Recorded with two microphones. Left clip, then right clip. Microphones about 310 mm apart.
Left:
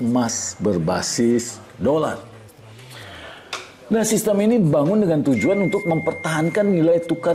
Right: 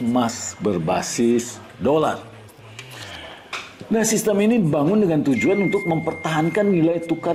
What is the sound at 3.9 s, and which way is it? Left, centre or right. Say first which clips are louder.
Speech: left 1 dB; left.